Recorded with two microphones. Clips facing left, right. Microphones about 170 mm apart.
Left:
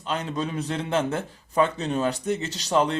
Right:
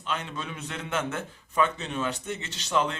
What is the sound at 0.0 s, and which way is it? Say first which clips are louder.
A man's voice: left 6 dB; 35° left (ahead or behind).